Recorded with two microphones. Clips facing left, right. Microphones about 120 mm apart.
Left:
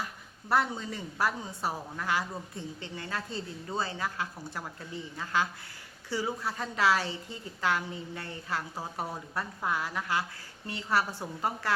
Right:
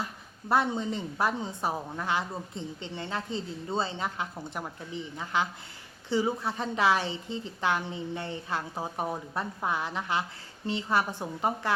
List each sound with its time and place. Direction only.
0.0 s a woman's voice: 20° right (ahead or behind)